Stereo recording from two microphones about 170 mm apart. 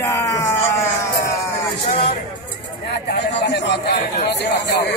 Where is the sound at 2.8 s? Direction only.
70° left (ahead or behind).